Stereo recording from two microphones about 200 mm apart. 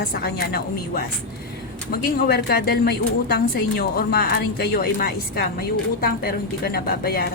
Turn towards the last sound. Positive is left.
turn(degrees=50)  # may be behind; listen again after turning